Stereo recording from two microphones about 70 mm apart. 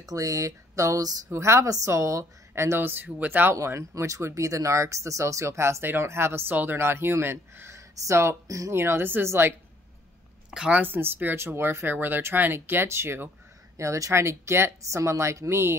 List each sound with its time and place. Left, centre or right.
0.0 s speech: right
1.3 s speech: right
3.5 s speech: right
7.9 s speech: right
8.5 s speech: right
8.7 s speech: right
10.5 s a woman's voice: centre
10.8 s speech: right
13.7 s speech: right